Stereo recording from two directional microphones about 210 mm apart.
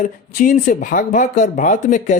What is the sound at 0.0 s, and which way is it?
Speech, 40° left (ahead or behind).